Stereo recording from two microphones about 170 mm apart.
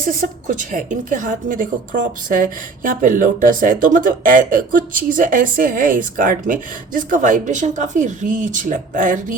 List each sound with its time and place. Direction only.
0.0 s speech: 50° right (ahead or behind)